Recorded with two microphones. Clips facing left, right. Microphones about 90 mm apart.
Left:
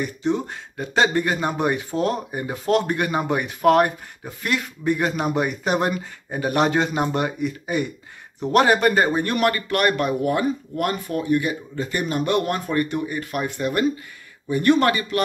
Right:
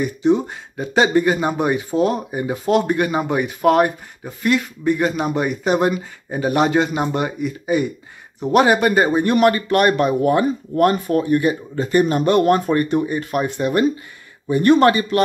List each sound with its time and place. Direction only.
0.0 s speech: 10° right (ahead or behind)
10.2 s speech: 35° right (ahead or behind)
14.5 s speech: 35° right (ahead or behind)